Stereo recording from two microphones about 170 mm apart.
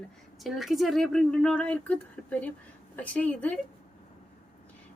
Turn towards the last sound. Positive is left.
turn(degrees=10)  # may be behind; listen again after turning